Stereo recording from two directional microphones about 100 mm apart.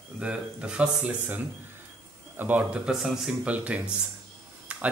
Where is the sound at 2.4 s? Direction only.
20° right (ahead or behind).